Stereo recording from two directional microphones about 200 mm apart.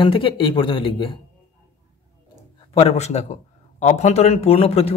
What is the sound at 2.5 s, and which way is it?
A man's voice, 30° left (ahead or behind).